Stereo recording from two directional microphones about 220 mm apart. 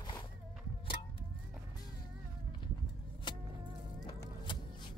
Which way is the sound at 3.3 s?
20° left (ahead or behind).